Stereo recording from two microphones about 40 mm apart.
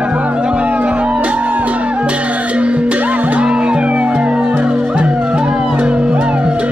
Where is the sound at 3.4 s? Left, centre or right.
Right.